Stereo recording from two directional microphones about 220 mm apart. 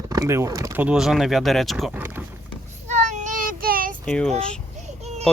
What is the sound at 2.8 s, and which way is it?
Child singing, 35° right (ahead or behind).